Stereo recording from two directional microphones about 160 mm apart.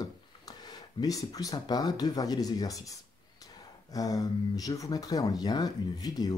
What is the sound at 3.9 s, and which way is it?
Speech, 20° left (ahead or behind).